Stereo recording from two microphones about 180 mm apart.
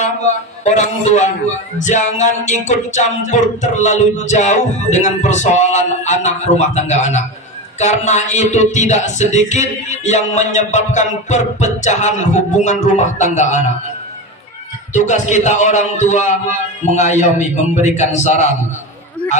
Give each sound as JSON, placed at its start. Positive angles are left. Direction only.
{"t": 0.0, "sound": "music", "side_deg": 40}
{"t": 14.9, "sound": "music", "side_deg": 40}